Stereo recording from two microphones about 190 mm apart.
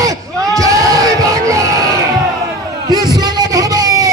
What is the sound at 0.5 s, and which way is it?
Crowd, 15° right (ahead or behind).